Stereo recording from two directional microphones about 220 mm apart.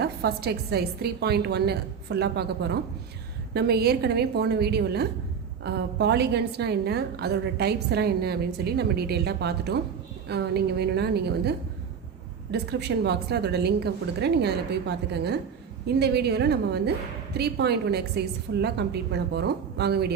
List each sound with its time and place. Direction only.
0.0 s a woman's voice: 45° right (ahead or behind)